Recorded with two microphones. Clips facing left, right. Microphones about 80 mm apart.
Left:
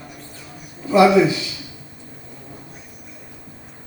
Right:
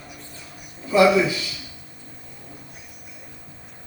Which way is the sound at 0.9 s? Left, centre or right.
Left.